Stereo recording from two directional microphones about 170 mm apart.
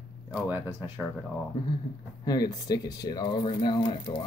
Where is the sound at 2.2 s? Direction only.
20° left (ahead or behind).